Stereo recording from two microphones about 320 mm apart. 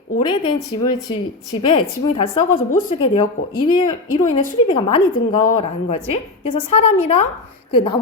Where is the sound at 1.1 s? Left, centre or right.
Centre.